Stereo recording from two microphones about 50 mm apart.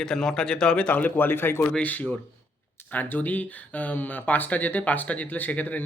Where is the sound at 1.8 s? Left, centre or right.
Left.